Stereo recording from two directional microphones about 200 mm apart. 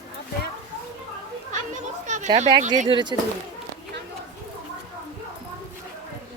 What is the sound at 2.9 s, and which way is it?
Speech, 20° right (ahead or behind).